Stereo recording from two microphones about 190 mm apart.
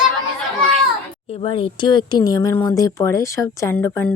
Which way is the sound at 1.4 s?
25° left (ahead or behind).